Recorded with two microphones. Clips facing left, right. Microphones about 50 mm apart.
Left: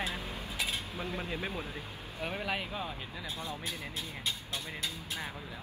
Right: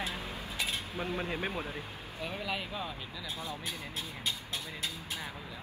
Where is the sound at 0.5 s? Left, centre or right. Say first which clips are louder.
Even; centre.